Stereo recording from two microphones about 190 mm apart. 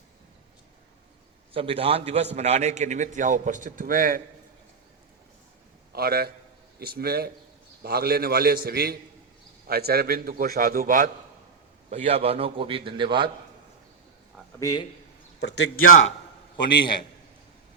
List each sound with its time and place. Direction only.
1.5 s a man's voice: 30° right (ahead or behind); by 4.2 s 45° right (ahead or behind)
5.9 s a man's voice: 55° right (ahead or behind)
11.9 s a man's voice: 35° right (ahead or behind)
14.6 s a man's voice: 20° left (ahead or behind)
15.4 s a man's voice: 65° left (ahead or behind)